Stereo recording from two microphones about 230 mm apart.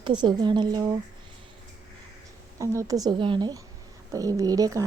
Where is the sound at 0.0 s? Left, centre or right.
Centre.